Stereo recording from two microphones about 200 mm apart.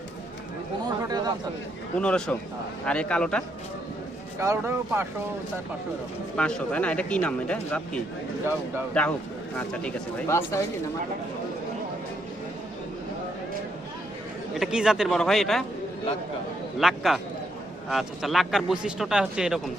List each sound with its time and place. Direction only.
1.0 s a sound: 20° right (ahead or behind)
2.0 s speech: 5° left (ahead or behind)
4.4 s speech: 15° right (ahead or behind)
6.3 s speech: 5° left (ahead or behind)
9.6 s speech: 5° left (ahead or behind)
14.5 s speech: centre (ahead or behind)
16.8 s speech: centre (ahead or behind)